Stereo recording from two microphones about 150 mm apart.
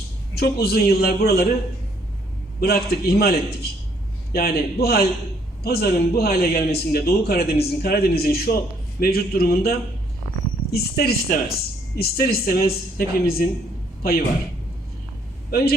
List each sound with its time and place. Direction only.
0.3 s a man's voice: 90° left
2.6 s a man's voice: 90° left
15.4 s speech: 90° left